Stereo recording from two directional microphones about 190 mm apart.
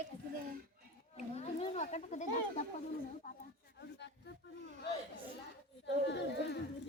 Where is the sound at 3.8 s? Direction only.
65° left (ahead or behind).